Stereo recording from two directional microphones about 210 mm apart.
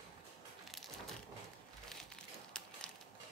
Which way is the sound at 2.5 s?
5° left (ahead or behind).